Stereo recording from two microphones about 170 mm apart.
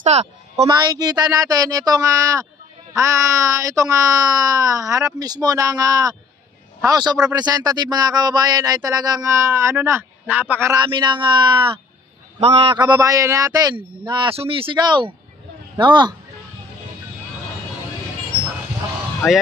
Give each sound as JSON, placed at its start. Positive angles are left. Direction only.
{"t": 0.0, "sound": "a woman's voice", "side_deg": -40}
{"t": 0.7, "sound": "speech", "side_deg": -25}
{"t": 10.7, "sound": "speech", "side_deg": -25}